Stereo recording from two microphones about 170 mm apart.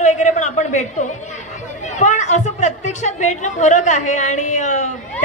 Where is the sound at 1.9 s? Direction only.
45° left (ahead or behind).